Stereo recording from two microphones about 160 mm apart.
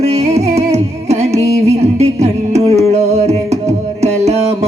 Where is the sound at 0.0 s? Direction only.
45° right (ahead or behind).